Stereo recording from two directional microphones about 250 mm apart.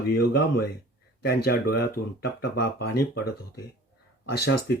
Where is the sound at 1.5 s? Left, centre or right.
Left.